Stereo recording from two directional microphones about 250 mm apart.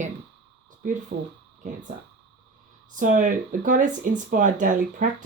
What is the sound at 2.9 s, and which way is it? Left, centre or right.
Speech, right.